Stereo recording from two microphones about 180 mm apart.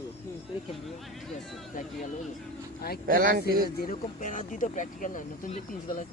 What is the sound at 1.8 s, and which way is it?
Speech, 50° left (ahead or behind).